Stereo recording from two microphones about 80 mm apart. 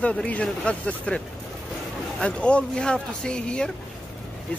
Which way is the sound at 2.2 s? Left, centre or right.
Centre.